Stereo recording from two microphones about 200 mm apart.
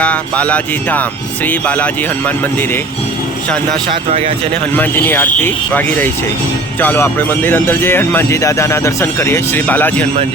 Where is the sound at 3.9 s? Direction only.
30° right (ahead or behind).